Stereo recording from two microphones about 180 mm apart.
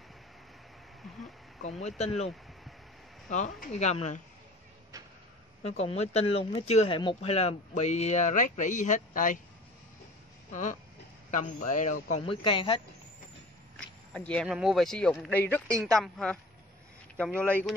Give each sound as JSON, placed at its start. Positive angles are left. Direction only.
{"t": 1.0, "sound": "a sound", "side_deg": 0}
{"t": 1.6, "sound": "speech", "side_deg": 40}
{"t": 5.6, "sound": "speech", "side_deg": 35}
{"t": 10.5, "sound": "speech", "side_deg": 45}
{"t": 12.2, "sound": "speech", "side_deg": 30}
{"t": 13.7, "sound": "a sound", "side_deg": 5}
{"t": 14.5, "sound": "speech", "side_deg": 0}